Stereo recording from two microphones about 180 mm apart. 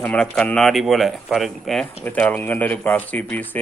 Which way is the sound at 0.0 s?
5° left (ahead or behind).